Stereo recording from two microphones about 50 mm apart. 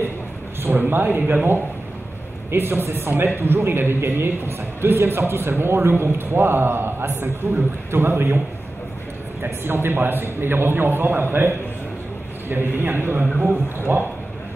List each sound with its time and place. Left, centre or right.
0.6 s a man's voice: right
2.5 s a man's voice: right
9.4 s a man's voice: right